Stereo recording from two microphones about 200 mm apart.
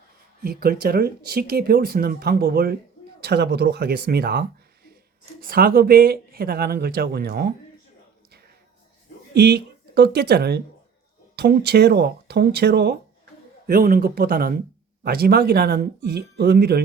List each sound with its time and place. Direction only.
0.4 s speech: 50° right (ahead or behind)
9.3 s speech: 55° right (ahead or behind)